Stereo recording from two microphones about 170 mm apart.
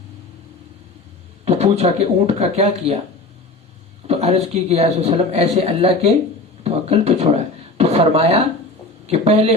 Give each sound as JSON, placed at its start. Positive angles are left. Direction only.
{"t": 1.5, "sound": "a man's voice", "side_deg": -40}
{"t": 4.0, "sound": "a man's voice", "side_deg": -35}